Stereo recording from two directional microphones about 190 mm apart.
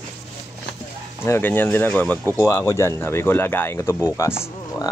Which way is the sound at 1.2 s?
10° left (ahead or behind).